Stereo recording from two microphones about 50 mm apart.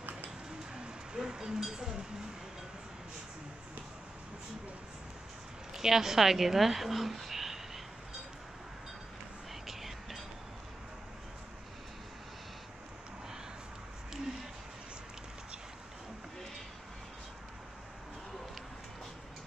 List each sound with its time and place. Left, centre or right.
1.1 s chink: centre
5.7 s a woman's voice: centre
9.7 s music: centre